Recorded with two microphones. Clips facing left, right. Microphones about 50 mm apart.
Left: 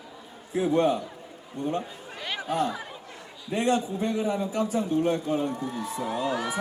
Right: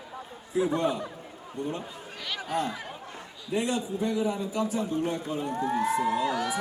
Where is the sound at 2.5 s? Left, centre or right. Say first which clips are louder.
Left 3 dB; left.